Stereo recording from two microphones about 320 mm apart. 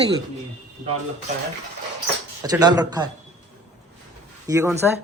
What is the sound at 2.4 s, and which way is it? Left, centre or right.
Speech, centre.